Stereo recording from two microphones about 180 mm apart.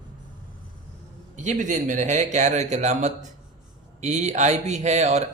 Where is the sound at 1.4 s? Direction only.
45° right (ahead or behind).